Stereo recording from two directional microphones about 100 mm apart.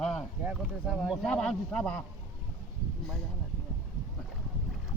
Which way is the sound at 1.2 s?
5° left (ahead or behind).